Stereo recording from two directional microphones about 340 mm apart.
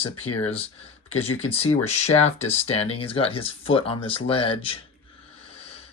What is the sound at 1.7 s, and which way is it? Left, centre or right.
Speech, left.